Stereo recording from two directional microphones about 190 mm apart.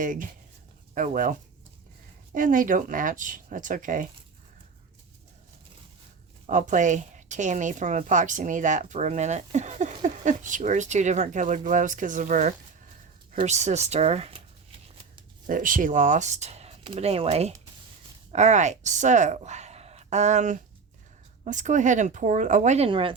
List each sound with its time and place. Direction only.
0.0 s speech: 45° right (ahead or behind)
6.5 s a woman's voice: 40° right (ahead or behind)
15.4 s a woman's voice: 45° right (ahead or behind); by 23.1 s 25° right (ahead or behind)